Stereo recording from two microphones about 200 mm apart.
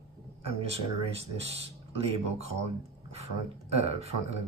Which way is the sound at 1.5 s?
30° right (ahead or behind).